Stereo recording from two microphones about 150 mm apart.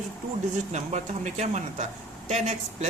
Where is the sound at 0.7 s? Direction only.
50° right (ahead or behind).